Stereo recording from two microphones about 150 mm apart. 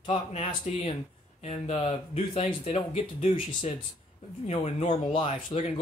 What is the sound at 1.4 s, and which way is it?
Speech, 45° left (ahead or behind).